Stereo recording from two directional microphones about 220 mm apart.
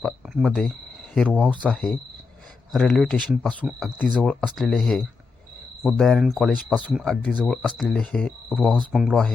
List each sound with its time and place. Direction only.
0.0 s speech: centre (ahead or behind)
2.7 s speech: centre (ahead or behind)